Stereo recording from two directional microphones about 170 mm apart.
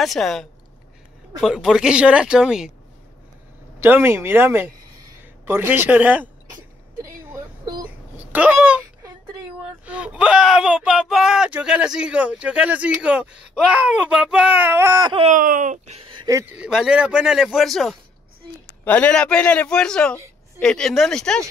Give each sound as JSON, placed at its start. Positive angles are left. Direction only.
{"t": 0.0, "sound": "speech", "side_deg": 0}
{"t": 3.8, "sound": "speech", "side_deg": -15}
{"t": 7.2, "sound": "a sound", "side_deg": -20}
{"t": 8.3, "sound": "speech", "side_deg": -10}
{"t": 15.2, "sound": "speech", "side_deg": -50}
{"t": 16.3, "sound": "speech", "side_deg": -15}